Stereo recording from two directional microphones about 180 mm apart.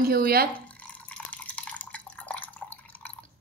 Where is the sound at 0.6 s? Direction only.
10° left (ahead or behind).